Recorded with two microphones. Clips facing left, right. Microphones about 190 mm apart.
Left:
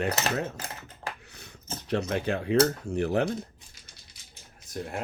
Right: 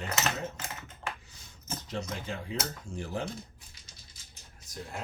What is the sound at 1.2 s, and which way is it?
Finger snapping, 65° left (ahead or behind).